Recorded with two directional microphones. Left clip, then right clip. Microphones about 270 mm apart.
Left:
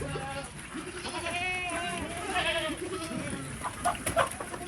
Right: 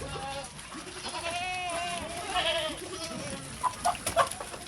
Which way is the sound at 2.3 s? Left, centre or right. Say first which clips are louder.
Right 1 dB; right.